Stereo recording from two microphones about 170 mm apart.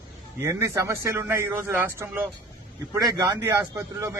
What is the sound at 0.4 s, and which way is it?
A man's voice, 15° right (ahead or behind).